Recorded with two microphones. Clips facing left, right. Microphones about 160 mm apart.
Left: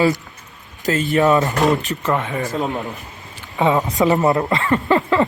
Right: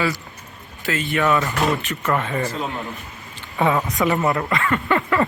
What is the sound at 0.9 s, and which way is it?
Speech, 40° left (ahead or behind).